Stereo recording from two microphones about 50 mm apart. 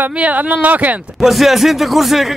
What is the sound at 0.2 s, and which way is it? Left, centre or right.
Speech, right.